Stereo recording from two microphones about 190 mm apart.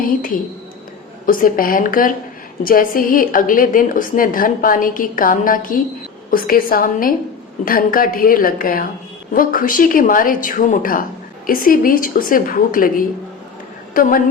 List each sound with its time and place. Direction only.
0.0 s a woman's voice: 45° left (ahead or behind)